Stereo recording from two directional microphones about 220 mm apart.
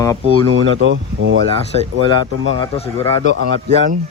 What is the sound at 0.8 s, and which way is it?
Speech, 55° right (ahead or behind).